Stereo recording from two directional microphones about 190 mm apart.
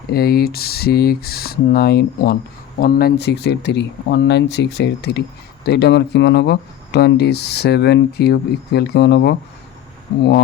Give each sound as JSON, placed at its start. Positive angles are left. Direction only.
{"t": 0.1, "sound": "speech", "side_deg": 55}